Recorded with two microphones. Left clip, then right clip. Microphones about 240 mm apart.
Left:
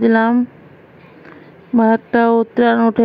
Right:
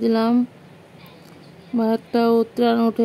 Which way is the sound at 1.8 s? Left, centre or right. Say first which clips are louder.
Left 6 dB; centre.